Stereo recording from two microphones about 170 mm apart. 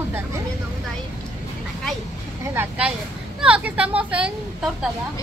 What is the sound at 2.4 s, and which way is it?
Speech, 15° right (ahead or behind).